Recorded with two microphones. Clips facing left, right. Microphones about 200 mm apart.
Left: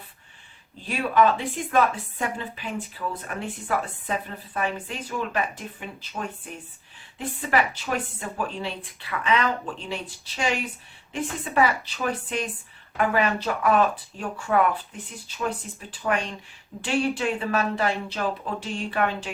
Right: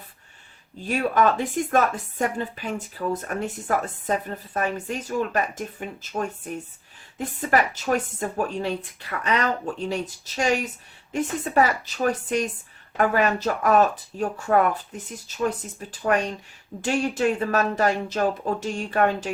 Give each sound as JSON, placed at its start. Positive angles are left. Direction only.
{"t": 0.8, "sound": "a woman's voice", "side_deg": -45}